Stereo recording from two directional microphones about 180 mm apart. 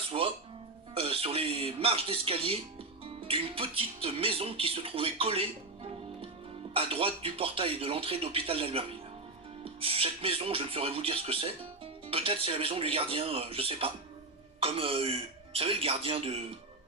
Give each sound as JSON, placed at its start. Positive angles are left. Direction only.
{"t": 0.1, "sound": "music", "side_deg": -30}
{"t": 0.9, "sound": "speech", "side_deg": -30}